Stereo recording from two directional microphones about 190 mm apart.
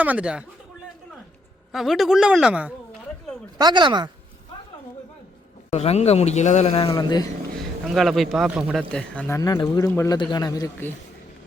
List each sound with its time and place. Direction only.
0.0 s speech: 5° right (ahead or behind)
1.7 s speech: centre (ahead or behind)
3.6 s speech: 25° right (ahead or behind)
5.7 s a man's voice: 35° left (ahead or behind)
7.9 s speech: centre (ahead or behind)
8.8 s speech: 5° left (ahead or behind)